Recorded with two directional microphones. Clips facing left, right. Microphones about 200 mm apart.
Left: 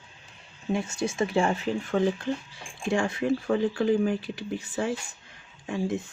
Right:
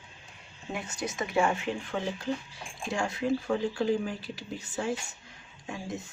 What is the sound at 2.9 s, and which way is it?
Speech, 55° left (ahead or behind).